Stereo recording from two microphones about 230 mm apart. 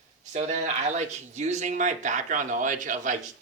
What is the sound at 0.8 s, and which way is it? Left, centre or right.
Speech, right.